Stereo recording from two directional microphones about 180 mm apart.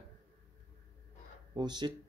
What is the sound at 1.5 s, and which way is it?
Speech, 25° right (ahead or behind).